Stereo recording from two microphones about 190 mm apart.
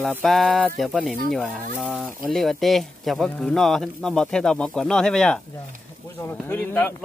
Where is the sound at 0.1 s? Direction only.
Centre (ahead or behind).